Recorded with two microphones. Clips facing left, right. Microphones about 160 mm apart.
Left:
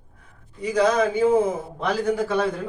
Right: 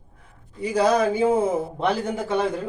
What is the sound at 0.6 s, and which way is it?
A man's voice, 30° right (ahead or behind).